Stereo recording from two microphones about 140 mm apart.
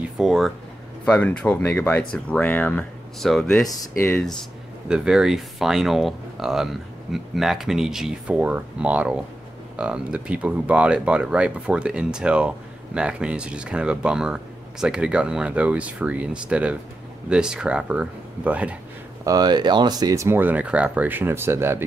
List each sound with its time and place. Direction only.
0.2 s speech: 5° right (ahead or behind)
1.0 s speech: 10° left (ahead or behind)
4.8 s speech: 5° right (ahead or behind)
19.2 s speech: 30° right (ahead or behind)